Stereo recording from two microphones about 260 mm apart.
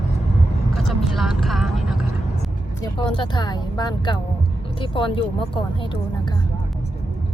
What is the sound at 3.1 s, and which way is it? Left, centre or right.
Speech, centre.